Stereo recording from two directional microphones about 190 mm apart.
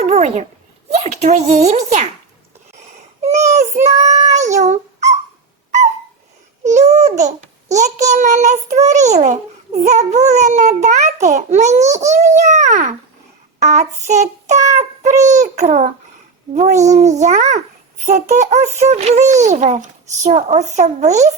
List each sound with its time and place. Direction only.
0.0 s a sound: 35° right (ahead or behind)
0.9 s a child's voice: 35° right (ahead or behind)
3.2 s a child's voice: 35° right (ahead or behind)
3.9 s female singing: 35° right (ahead or behind)
6.7 s a child's voice: 40° right (ahead or behind)
14.8 s child singing: 40° right (ahead or behind)
15.3 s a child's voice: 40° right (ahead or behind)